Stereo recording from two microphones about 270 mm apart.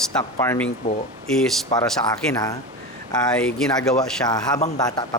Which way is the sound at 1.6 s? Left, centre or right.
Centre.